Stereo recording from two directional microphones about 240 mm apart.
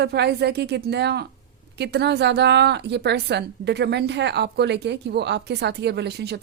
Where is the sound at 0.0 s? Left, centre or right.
Right.